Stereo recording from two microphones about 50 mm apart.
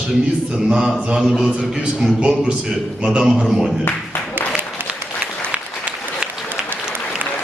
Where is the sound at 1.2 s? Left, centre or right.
Centre.